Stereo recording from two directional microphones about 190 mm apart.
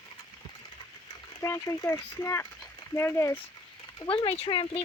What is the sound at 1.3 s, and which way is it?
Speech, 15° left (ahead or behind).